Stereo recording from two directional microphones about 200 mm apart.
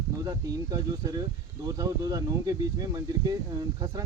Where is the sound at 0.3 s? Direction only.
15° right (ahead or behind).